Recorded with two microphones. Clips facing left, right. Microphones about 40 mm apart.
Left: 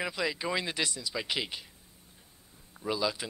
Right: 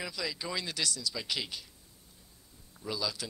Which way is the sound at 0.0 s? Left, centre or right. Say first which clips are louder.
Left 5 dB; left.